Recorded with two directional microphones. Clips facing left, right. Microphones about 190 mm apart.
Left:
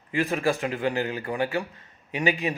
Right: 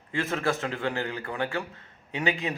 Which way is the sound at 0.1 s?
15° left (ahead or behind).